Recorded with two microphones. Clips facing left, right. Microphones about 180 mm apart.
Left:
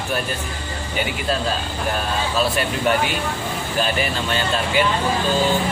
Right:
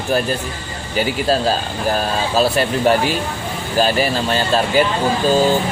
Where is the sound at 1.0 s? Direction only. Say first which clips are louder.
Right 6 dB; 35° right (ahead or behind).